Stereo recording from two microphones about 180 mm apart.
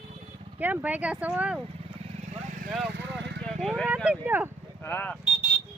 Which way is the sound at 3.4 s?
5° left (ahead or behind).